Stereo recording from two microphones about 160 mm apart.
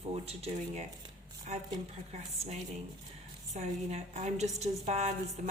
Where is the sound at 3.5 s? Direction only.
45° right (ahead or behind).